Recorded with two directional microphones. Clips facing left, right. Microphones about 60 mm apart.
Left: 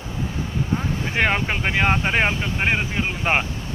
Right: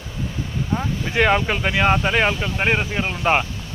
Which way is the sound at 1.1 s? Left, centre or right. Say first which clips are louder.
Right 4 dB; left.